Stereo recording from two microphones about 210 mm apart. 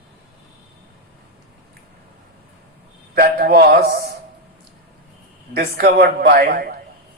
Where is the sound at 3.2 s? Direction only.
45° right (ahead or behind).